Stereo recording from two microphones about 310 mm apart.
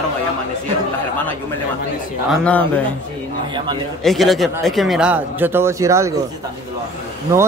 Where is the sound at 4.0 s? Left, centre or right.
Centre.